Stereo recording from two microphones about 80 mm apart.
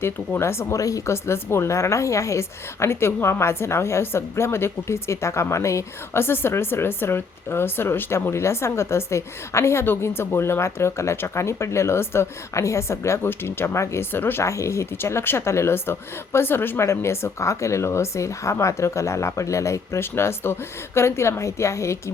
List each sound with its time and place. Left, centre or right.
0.0 s speech: left
14.4 s speech: left